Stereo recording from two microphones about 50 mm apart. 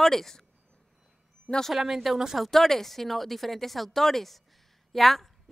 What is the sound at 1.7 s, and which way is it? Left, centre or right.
A woman's voice, centre.